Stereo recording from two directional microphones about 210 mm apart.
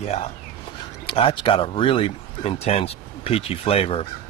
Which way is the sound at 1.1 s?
25° left (ahead or behind).